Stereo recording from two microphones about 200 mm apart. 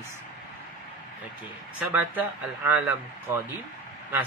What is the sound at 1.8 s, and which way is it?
Speech, 10° right (ahead or behind).